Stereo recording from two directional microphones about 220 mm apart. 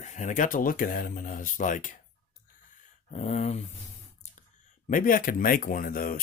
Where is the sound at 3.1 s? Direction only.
30° left (ahead or behind).